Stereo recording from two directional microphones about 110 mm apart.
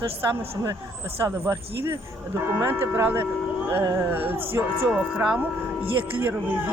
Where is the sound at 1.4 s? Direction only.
25° right (ahead or behind).